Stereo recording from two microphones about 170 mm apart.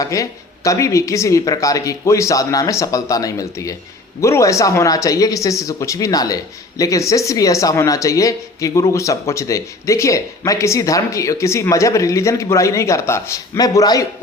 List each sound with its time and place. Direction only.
0.0 s speech: 20° left (ahead or behind)